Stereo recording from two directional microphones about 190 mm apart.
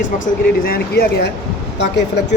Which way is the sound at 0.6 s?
55° left (ahead or behind).